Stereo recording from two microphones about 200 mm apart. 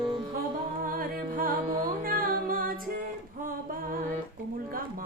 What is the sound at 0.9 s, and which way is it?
Music, 45° right (ahead or behind).